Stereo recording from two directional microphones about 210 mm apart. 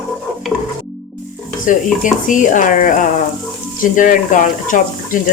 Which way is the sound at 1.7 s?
40° left (ahead or behind).